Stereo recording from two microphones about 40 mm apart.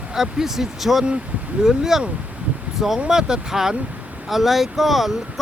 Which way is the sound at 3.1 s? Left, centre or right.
Centre.